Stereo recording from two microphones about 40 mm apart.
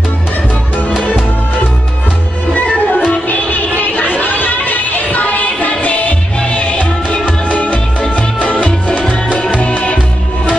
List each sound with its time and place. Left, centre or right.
2.5 s music: left